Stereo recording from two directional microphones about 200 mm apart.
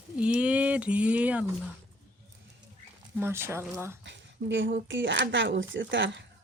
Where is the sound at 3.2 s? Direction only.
10° right (ahead or behind).